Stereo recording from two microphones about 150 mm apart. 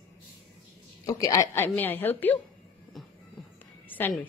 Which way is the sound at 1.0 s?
25° left (ahead or behind).